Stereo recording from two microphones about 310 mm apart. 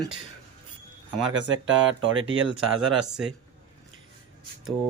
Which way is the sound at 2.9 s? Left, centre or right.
Centre.